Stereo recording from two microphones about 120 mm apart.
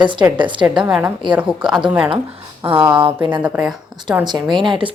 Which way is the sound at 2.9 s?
45° right (ahead or behind).